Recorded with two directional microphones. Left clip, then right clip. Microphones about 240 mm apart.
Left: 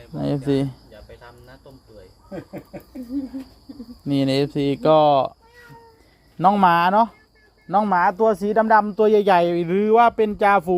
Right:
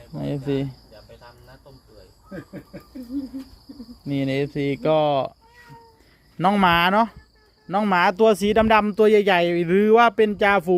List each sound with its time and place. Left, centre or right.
0.2 s speech: centre
4.0 s speech: centre
6.4 s speech: centre
8.1 s speech: right